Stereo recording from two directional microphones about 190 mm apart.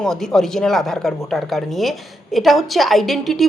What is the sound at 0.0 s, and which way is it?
A woman's voice, centre (ahead or behind).